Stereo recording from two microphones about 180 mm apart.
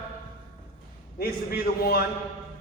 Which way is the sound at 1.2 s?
60° left (ahead or behind).